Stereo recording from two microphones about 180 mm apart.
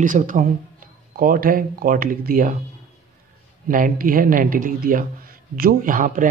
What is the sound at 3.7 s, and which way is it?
Speech, 50° right (ahead or behind).